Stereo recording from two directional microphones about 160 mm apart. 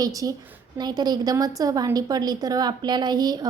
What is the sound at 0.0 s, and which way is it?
A woman's voice, 20° right (ahead or behind).